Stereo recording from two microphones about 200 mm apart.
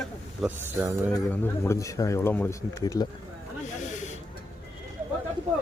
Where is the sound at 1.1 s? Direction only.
15° left (ahead or behind).